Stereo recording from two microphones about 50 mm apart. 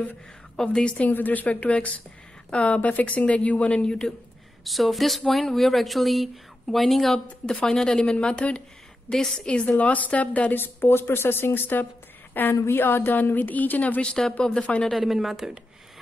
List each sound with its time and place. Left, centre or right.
0.6 s a woman's voice: centre
0.9 s a woman's voice: left; by 4.1 s centre
4.6 s a woman's voice: centre
9.8 s speech: left
10.5 s a woman's voice: left
14.0 s a woman's voice: centre
14.9 s speech: centre